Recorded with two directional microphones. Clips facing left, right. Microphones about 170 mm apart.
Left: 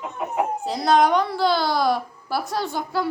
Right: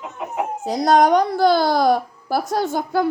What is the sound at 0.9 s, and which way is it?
Speech, 45° right (ahead or behind).